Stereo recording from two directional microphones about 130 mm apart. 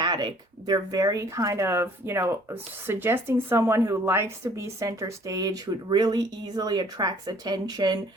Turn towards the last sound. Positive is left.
turn(degrees=-30)  # may be behind; listen again after turning